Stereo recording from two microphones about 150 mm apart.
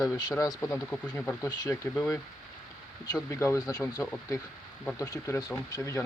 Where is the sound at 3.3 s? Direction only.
20° left (ahead or behind).